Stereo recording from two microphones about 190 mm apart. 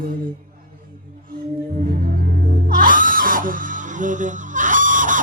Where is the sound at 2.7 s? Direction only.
45° right (ahead or behind).